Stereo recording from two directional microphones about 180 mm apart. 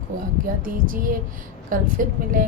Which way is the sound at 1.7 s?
50° right (ahead or behind).